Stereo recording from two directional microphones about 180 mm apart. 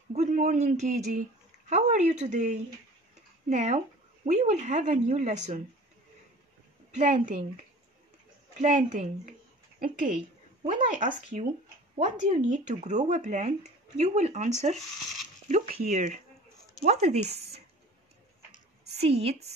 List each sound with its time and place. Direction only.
0.1 s speech: 40° right (ahead or behind)
7.0 s a woman's voice: 45° right (ahead or behind)
18.9 s speech: 35° right (ahead or behind)